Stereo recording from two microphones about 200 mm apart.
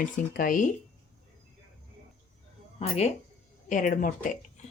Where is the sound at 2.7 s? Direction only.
35° left (ahead or behind).